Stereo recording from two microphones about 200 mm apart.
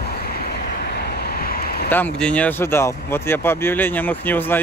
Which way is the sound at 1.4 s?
45° left (ahead or behind).